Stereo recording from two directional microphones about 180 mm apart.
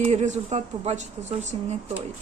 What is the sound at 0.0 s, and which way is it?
Speech, 40° right (ahead or behind).